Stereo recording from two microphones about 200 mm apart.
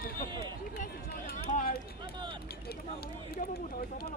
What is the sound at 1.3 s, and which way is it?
Run, 45° left (ahead or behind).